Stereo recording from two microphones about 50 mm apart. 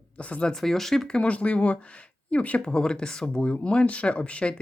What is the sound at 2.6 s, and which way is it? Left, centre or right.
Speech, centre.